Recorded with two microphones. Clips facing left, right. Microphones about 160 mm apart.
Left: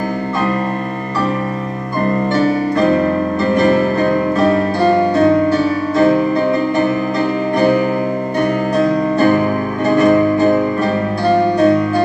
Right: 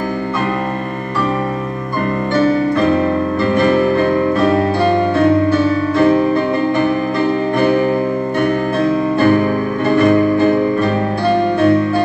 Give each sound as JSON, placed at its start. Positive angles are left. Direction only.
{"t": 9.8, "sound": "music", "side_deg": 45}